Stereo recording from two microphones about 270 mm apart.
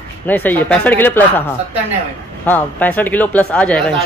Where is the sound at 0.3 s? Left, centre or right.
Centre.